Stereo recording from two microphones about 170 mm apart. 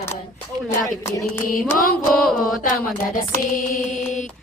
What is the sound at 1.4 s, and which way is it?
Mantra, 55° left (ahead or behind).